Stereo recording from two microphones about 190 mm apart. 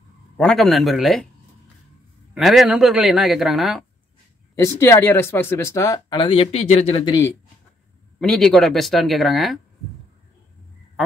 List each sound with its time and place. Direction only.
0.4 s speech: centre (ahead or behind)
2.3 s speech: centre (ahead or behind)
4.6 s speech: 15° left (ahead or behind); by 7.0 s 30° left (ahead or behind)
7.1 s speech: 15° left (ahead or behind)
8.2 s speech: 5° left (ahead or behind)